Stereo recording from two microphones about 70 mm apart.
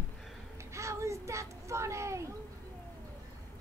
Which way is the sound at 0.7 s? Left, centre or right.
Right.